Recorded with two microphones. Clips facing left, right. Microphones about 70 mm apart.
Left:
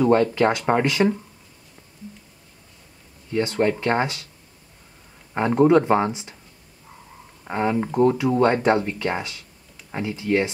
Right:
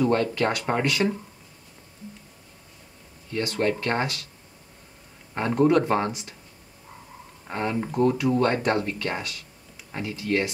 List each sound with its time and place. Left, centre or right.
0.0 s speech: centre
3.3 s speech: centre
5.3 s speech: centre
7.4 s speech: centre